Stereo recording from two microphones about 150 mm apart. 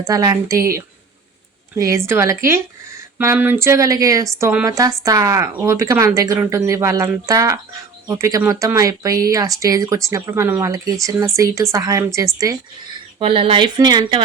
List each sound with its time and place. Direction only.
0.0 s speech: 25° right (ahead or behind)
1.7 s speech: 20° right (ahead or behind)
13.1 s speech: 35° right (ahead or behind)